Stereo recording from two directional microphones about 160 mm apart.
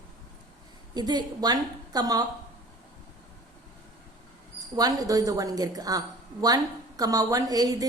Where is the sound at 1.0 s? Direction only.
25° right (ahead or behind).